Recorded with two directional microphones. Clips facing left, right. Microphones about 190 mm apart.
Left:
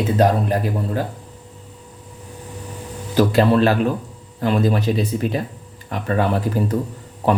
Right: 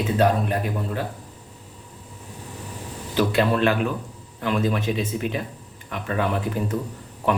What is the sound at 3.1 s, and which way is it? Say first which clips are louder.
A man's voice: left 5 dB; 35° left (ahead or behind).